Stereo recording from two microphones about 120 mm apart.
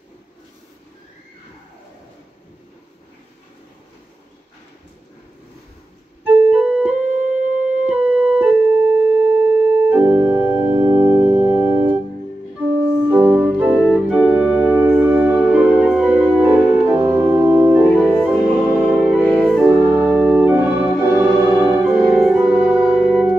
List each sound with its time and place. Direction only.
6.2 s organ: 15° right (ahead or behind)
7.9 s keyboard: 15° right (ahead or behind)
11.1 s music: 50° right (ahead or behind)
11.4 s organ: 15° right (ahead or behind)
14.3 s music: 15° right (ahead or behind)
18.0 s music: centre (ahead or behind)
19.6 s organ: 15° right (ahead or behind)
22.7 s music: 10° right (ahead or behind)